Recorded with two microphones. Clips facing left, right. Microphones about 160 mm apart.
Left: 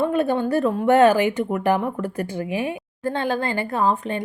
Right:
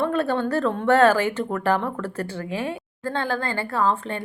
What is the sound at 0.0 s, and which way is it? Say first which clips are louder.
A woman's voice: left 2 dB; 15° left (ahead or behind).